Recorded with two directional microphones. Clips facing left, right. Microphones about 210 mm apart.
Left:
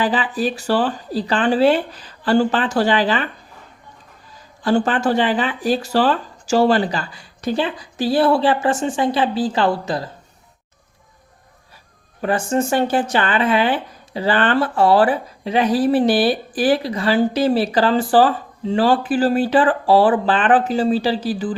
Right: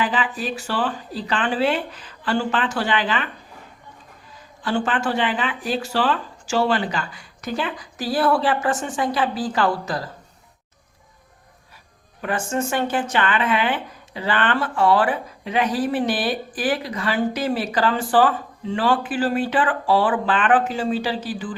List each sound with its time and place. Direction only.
0.0 s speech: 35° left (ahead or behind)
4.6 s speech: 40° left (ahead or behind)
12.2 s speech: 35° left (ahead or behind)